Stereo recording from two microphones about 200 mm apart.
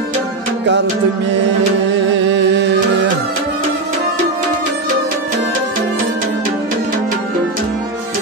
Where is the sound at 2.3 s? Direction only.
60° right (ahead or behind).